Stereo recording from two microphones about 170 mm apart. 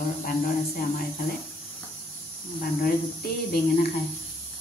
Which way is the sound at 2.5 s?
55° left (ahead or behind).